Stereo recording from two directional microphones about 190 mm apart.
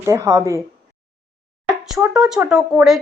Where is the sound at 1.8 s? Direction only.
5° right (ahead or behind).